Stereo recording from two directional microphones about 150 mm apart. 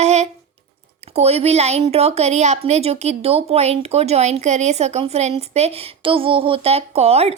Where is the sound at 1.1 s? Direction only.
45° right (ahead or behind).